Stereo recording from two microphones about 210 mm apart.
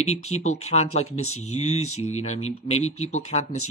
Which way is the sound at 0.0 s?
30° left (ahead or behind).